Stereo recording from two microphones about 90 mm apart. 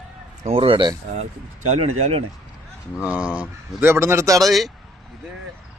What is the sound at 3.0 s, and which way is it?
Speech, 15° right (ahead or behind).